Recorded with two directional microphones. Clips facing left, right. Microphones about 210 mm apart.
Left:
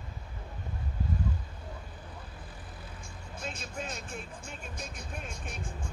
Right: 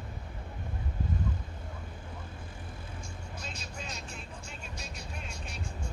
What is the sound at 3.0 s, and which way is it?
Vehicle, 55° left (ahead or behind).